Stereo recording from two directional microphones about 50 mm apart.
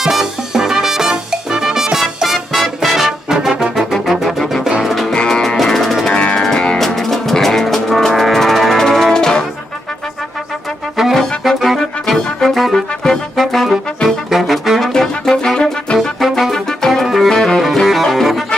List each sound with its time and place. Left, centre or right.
0.0 s music: centre
5.1 s music: centre
6.0 s music: centre
11.4 s music: centre
13.0 s brass instrument: centre
14.9 s music: centre
16.2 s music: centre